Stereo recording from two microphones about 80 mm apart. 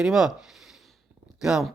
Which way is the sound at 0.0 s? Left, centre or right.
Centre.